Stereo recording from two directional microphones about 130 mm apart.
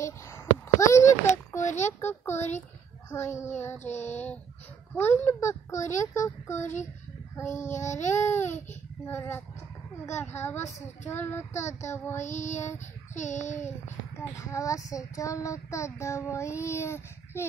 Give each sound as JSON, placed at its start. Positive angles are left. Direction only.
{"t": 0.0, "sound": "a sound", "side_deg": 25}
{"t": 1.9, "sound": "speech", "side_deg": 20}
{"t": 2.3, "sound": "speech", "side_deg": 60}
{"t": 3.1, "sound": "speech", "side_deg": 20}
{"t": 3.9, "sound": "speech", "side_deg": 60}
{"t": 4.9, "sound": "speech", "side_deg": 15}
{"t": 7.9, "sound": "speech", "side_deg": 65}
{"t": 8.2, "sound": "speech", "side_deg": 20}
{"t": 12.3, "sound": "a child's voice", "side_deg": 70}
{"t": 14.1, "sound": "speech", "side_deg": 25}